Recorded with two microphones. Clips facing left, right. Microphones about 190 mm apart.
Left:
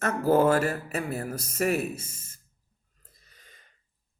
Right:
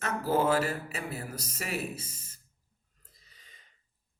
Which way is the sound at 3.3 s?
50° left (ahead or behind).